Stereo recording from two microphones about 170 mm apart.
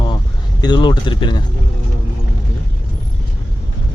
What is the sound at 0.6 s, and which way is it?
Speech, 25° left (ahead or behind).